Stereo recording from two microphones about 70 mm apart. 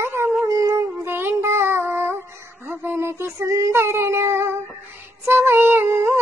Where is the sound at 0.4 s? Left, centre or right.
Right.